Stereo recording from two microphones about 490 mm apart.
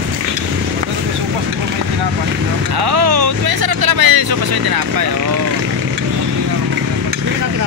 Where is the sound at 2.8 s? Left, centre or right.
Right.